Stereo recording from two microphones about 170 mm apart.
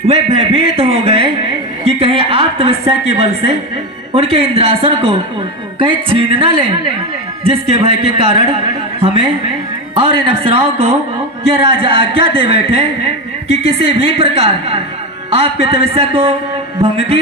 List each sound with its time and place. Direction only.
0.1 s a man's voice: 35° right (ahead or behind)
9.9 s a man's voice: 35° right (ahead or behind)